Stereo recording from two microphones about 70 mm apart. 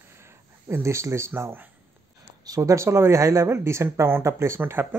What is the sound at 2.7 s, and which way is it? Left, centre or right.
Speech, right.